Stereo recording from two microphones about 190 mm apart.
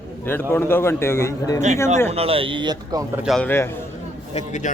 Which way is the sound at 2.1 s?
30° right (ahead or behind).